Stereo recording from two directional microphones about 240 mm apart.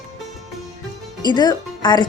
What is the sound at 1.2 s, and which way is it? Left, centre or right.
Speech, centre.